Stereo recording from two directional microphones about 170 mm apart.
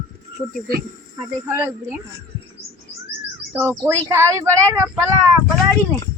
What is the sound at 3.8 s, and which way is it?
A woman's voice, 15° right (ahead or behind).